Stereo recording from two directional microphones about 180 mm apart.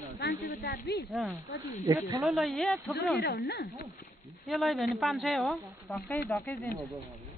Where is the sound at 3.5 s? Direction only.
60° left (ahead or behind).